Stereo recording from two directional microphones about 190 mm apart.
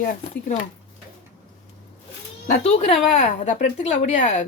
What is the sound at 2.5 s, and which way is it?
Speech, 35° left (ahead or behind).